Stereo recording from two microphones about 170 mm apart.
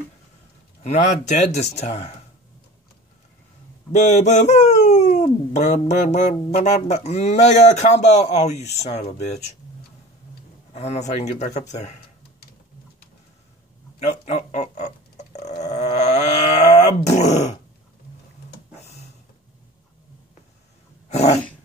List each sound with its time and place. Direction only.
0.8 s a man's voice: 45° left (ahead or behind)
3.9 s speech: 45° left (ahead or behind)
10.7 s speech: 40° left (ahead or behind)
13.9 s a sound: 40° left (ahead or behind)
15.6 s wild animals: 45° left (ahead or behind)
17.3 s a man's voice: 40° left (ahead or behind)